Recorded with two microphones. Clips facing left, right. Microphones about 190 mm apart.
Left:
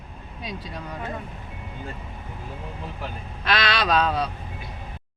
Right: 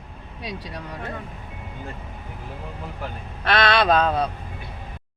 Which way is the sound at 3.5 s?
60° right (ahead or behind).